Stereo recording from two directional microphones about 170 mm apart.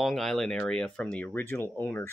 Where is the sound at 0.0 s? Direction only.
Centre (ahead or behind).